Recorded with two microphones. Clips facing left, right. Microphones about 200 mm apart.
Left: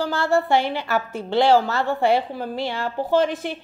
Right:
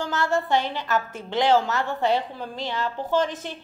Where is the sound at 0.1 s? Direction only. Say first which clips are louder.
Left 2 dB; 10° left (ahead or behind).